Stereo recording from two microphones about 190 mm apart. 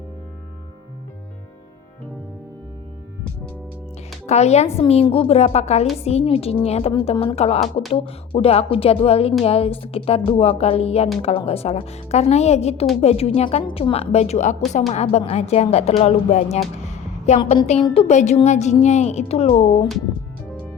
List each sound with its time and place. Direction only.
4.3 s speech: 35° left (ahead or behind)